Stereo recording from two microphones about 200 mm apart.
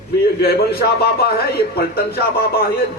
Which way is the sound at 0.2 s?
55° left (ahead or behind).